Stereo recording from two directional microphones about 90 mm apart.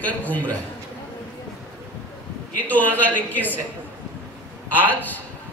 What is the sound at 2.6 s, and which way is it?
A man's voice, 20° left (ahead or behind).